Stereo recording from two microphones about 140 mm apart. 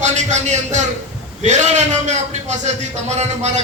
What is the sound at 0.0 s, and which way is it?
A man's voice, 55° right (ahead or behind).